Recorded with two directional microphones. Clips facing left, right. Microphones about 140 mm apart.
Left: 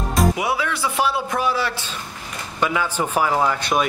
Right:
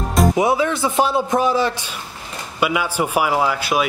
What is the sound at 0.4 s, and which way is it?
A man's voice, 25° right (ahead or behind).